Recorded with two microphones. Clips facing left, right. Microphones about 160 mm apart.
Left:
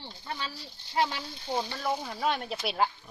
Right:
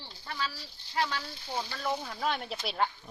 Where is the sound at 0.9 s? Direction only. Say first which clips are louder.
Left 3 dB; 25° left (ahead or behind).